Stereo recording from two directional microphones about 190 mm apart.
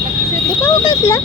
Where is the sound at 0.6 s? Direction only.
15° left (ahead or behind).